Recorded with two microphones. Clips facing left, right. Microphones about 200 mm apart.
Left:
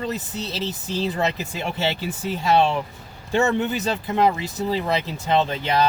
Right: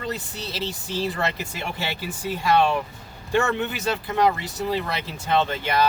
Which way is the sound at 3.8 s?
20° left (ahead or behind).